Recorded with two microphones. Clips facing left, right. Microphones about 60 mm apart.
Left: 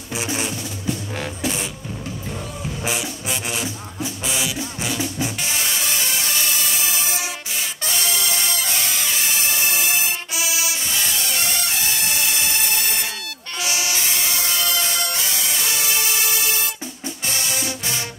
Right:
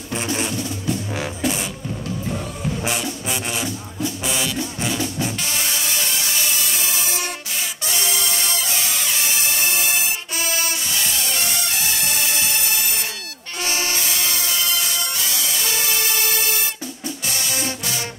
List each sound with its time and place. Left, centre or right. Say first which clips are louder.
0.1 s music: right 1 dB; centre
1.1 s beatboxing: right 2 dB; centre
2.8 s music: right 1 dB; centre
8.7 s music: even; centre
9.6 s music: even; right
13.6 s music: right 1 dB; right
17.3 s music: left 2 dB; left